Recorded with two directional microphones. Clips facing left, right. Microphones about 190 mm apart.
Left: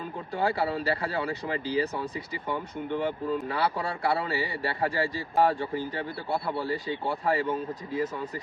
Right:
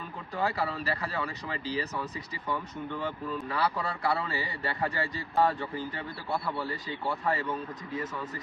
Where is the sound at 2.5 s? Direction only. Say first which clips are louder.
Left 3 dB; 25° left (ahead or behind).